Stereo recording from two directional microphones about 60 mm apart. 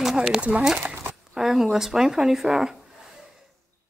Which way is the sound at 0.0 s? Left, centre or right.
Centre.